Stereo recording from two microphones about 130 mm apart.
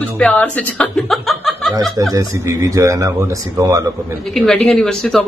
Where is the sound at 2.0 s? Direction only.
25° right (ahead or behind).